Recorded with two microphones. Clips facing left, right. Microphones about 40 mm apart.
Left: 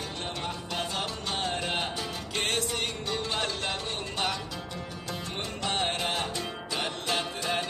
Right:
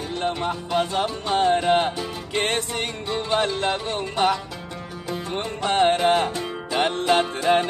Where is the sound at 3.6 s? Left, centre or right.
Right.